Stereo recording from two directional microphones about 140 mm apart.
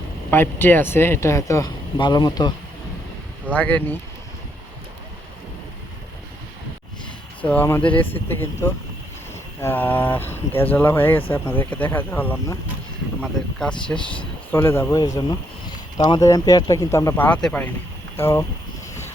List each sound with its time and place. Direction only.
0.3 s speech: 15° left (ahead or behind)
2.0 s speech: 30° left (ahead or behind)
3.5 s speech: 10° left (ahead or behind)
7.4 s speech: 15° left (ahead or behind)
13.9 s speech: 35° left (ahead or behind)
14.5 s speech: 20° left (ahead or behind)
17.2 s speech: 10° left (ahead or behind)